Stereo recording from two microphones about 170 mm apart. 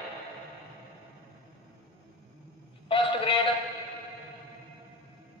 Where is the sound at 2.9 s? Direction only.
30° left (ahead or behind).